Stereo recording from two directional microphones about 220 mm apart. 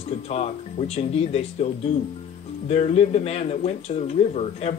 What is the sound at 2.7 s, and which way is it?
Speech, 30° left (ahead or behind).